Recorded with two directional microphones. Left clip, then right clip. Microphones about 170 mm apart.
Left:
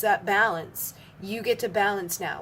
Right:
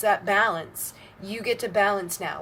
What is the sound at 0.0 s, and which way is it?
Speech, 20° left (ahead or behind).